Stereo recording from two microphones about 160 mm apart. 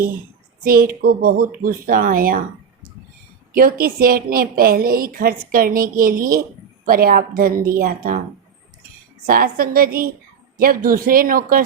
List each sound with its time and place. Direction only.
0.6 s a woman's voice: 65° right (ahead or behind)
3.5 s a woman's voice: 65° right (ahead or behind)
9.2 s a woman's voice: 65° right (ahead or behind)